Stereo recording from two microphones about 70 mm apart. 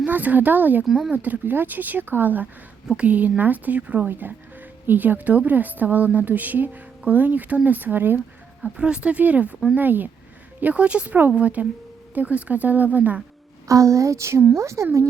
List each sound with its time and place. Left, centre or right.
0.0 s a woman's voice: right
0.9 s speech: centre
1.1 s a woman's voice: right
8.6 s a woman's voice: centre
13.7 s a sound: right